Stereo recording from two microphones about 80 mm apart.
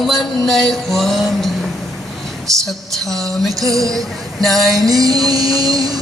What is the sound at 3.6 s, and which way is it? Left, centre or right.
Music, right.